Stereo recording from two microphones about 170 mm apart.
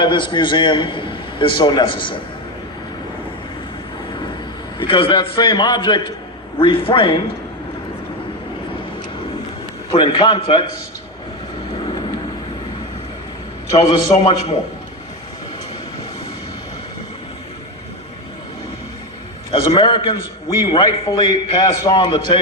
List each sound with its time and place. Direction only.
0.0 s a man's voice: 30° left (ahead or behind)
4.8 s a man's voice: 30° left (ahead or behind)
9.9 s a man's voice: 30° left (ahead or behind)
11.9 s vehicle: 25° left (ahead or behind)
13.7 s a man's voice: 30° left (ahead or behind)
19.5 s a man's voice: 25° left (ahead or behind)